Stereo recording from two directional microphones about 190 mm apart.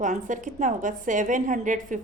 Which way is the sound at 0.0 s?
40° right (ahead or behind).